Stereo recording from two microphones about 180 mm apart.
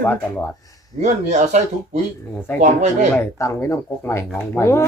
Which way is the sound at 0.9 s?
40° right (ahead or behind).